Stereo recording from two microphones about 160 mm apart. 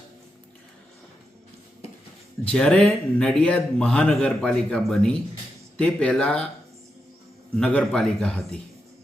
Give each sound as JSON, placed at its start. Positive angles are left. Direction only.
{"t": 2.4, "sound": "a man's voice", "side_deg": 5}
{"t": 7.6, "sound": "a man's voice", "side_deg": 5}